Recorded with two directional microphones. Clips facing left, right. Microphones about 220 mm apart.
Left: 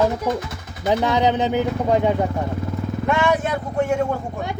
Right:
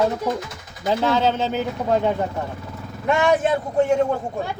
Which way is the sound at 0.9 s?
15° left (ahead or behind).